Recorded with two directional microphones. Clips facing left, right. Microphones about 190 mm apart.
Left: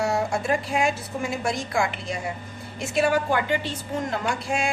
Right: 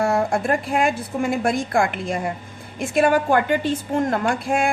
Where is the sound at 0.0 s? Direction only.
55° right (ahead or behind).